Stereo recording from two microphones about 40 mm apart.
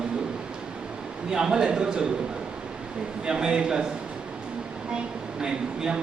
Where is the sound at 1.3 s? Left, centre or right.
Centre.